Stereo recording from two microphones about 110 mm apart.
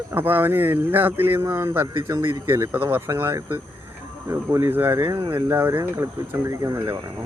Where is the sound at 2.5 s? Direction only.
20° right (ahead or behind).